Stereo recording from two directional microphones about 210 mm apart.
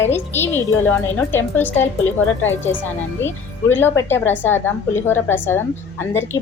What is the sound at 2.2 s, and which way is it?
Speech, 70° left (ahead or behind).